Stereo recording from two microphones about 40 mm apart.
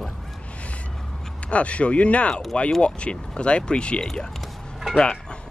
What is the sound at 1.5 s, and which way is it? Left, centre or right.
Speech, left.